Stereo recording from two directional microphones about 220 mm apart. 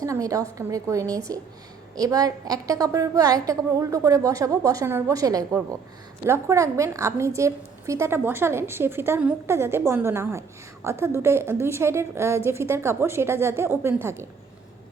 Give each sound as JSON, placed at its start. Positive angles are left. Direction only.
{"t": 0.0, "sound": "a woman's voice", "side_deg": -15}